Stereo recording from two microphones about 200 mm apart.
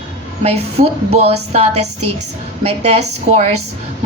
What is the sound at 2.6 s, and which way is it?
Speech, 30° right (ahead or behind).